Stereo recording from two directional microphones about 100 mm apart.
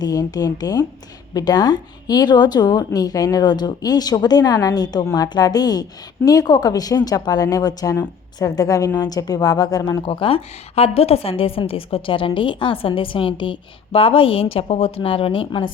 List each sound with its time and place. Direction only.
0.0 s a woman's voice: 40° left (ahead or behind)
10.1 s a woman's voice: 65° left (ahead or behind)